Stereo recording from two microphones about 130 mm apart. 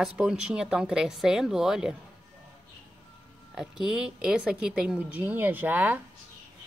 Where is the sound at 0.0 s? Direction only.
5° right (ahead or behind).